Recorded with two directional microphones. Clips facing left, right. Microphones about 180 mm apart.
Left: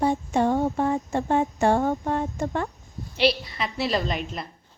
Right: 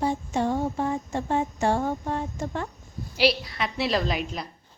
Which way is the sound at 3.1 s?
Centre (ahead or behind).